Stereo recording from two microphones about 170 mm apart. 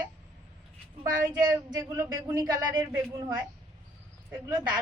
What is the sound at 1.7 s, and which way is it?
Speech, 20° right (ahead or behind).